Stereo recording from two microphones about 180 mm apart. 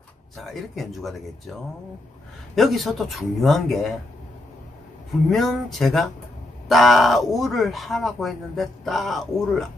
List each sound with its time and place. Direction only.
0.4 s speech: centre (ahead or behind)
2.5 s speech: centre (ahead or behind)
5.3 s speech: centre (ahead or behind)